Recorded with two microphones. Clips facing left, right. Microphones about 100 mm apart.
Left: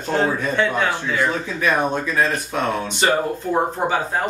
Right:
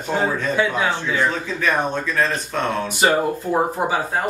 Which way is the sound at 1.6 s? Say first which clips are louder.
Left 2 dB; 15° left (ahead or behind).